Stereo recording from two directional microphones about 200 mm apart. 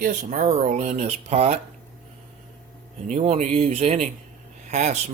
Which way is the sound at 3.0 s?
35° right (ahead or behind).